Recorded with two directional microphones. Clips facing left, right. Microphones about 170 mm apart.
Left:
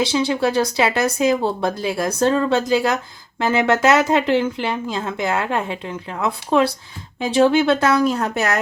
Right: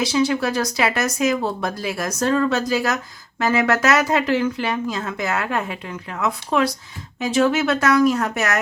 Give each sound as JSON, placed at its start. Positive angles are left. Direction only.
{"t": 0.0, "sound": "speech", "side_deg": 30}